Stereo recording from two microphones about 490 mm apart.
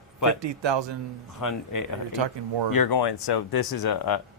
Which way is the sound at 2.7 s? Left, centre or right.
Left.